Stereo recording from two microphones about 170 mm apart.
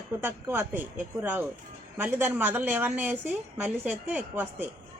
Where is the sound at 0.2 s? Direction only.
10° right (ahead or behind).